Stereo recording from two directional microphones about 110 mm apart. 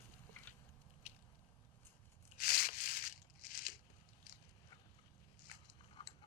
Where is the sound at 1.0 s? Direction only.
90° left.